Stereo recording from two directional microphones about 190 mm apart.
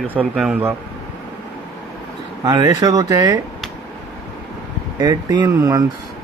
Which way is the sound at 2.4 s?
20° right (ahead or behind).